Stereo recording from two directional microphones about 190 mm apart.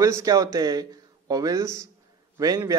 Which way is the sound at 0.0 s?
15° right (ahead or behind).